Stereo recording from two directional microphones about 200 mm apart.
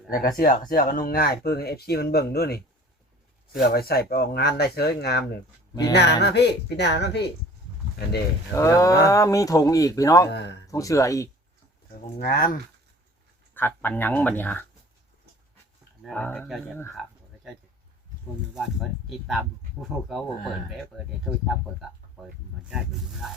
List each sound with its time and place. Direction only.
0.1 s speech: 45° left (ahead or behind)
3.6 s speech: 50° left (ahead or behind)
8.5 s speech: 15° left (ahead or behind)
12.2 s speech: 45° left (ahead or behind)
13.5 s speech: 10° left (ahead or behind)
16.0 s speech: 5° left (ahead or behind)
18.5 s speech: centre (ahead or behind)